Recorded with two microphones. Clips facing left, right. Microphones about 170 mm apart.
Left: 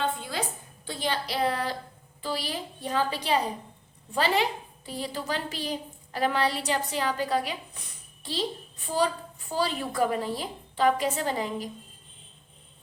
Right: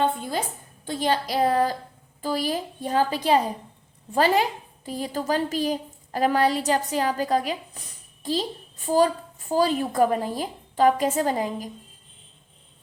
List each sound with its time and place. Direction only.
0.0 s music: 45° right (ahead or behind)
0.9 s a woman's voice: 45° right (ahead or behind)
9.5 s a woman's voice: 45° right (ahead or behind)